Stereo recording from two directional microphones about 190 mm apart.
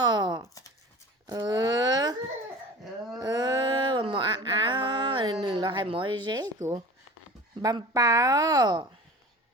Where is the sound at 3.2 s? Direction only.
20° right (ahead or behind).